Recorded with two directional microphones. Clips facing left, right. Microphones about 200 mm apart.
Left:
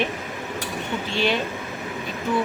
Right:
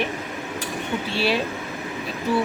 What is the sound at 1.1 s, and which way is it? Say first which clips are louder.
Speech: even; 5° right (ahead or behind).